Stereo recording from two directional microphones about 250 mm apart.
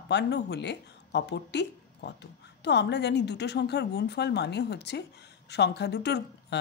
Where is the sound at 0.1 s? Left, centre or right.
Left.